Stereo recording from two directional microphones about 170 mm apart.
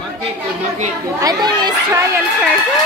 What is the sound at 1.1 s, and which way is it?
Speech, 25° right (ahead or behind).